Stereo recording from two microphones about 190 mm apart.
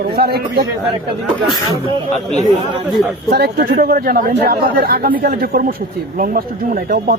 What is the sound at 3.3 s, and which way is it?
A man's voice, 60° right (ahead or behind).